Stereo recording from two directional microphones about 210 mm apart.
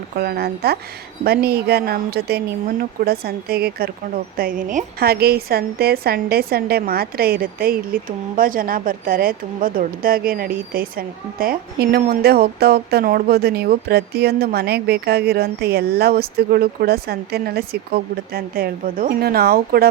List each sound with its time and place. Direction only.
0.2 s speech: 50° right (ahead or behind)